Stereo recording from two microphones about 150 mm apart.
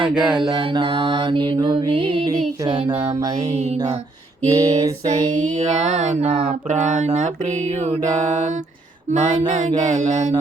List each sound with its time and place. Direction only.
0.2 s mantra: 30° right (ahead or behind)
4.4 s a sound: 20° right (ahead or behind)
5.3 s mantra: 55° right (ahead or behind)
6.7 s mantra: 55° right (ahead or behind)
9.1 s mantra: 55° right (ahead or behind)